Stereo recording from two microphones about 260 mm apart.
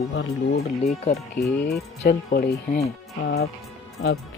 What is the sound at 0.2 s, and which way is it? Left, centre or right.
Speech, left.